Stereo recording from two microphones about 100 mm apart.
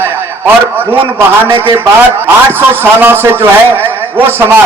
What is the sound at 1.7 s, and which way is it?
A man's voice, 25° right (ahead or behind).